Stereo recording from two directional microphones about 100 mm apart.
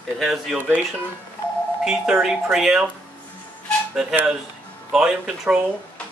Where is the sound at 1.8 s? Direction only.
5° right (ahead or behind).